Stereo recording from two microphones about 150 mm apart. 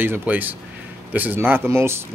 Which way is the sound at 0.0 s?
10° right (ahead or behind).